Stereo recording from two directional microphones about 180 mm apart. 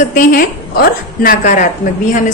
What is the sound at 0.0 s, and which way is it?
A woman's voice, 45° left (ahead or behind).